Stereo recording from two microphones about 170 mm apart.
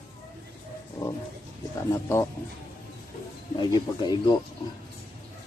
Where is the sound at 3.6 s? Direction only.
25° left (ahead or behind).